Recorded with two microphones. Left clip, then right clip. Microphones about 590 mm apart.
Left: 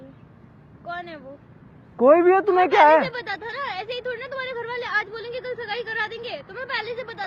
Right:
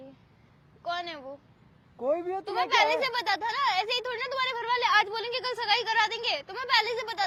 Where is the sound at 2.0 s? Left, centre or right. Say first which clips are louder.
Left 14 dB; left.